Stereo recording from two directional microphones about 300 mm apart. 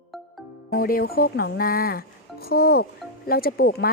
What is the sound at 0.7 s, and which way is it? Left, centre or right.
A woman's voice, left.